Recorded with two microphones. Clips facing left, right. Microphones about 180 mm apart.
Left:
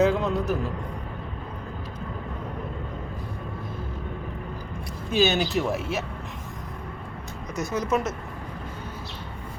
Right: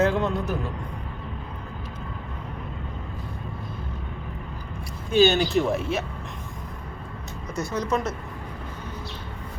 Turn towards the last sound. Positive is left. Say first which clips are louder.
# even
turn(degrees=20)  # may be behind; listen again after turning